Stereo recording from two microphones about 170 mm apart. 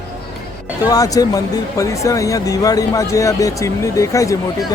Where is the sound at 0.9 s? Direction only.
20° left (ahead or behind).